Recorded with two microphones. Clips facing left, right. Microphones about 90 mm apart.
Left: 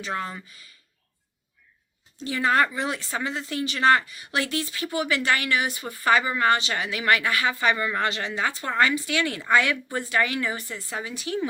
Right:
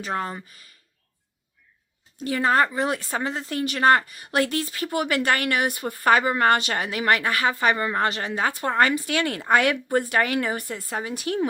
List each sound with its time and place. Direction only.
0.0 s speech: 40° right (ahead or behind)
2.1 s speech: 50° right (ahead or behind)